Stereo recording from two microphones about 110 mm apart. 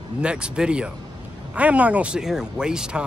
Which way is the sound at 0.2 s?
10° right (ahead or behind).